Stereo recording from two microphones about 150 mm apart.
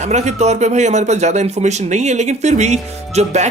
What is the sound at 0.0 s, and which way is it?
Speech, 50° right (ahead or behind).